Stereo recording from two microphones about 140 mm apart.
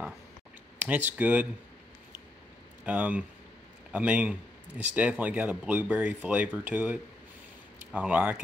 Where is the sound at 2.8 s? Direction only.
10° right (ahead or behind).